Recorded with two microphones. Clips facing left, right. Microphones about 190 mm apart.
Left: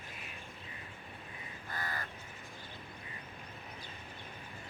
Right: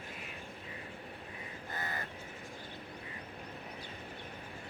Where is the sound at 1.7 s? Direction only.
20° right (ahead or behind).